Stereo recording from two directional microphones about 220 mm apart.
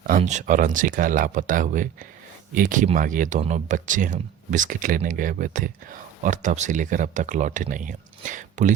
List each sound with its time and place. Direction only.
0.1 s speech: 35° right (ahead or behind)